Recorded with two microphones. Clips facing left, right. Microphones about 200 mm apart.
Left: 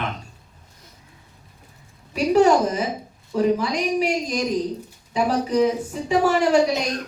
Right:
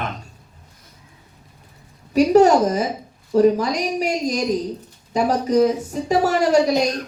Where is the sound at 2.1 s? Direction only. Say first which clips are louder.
Right 3 dB; 40° right (ahead or behind).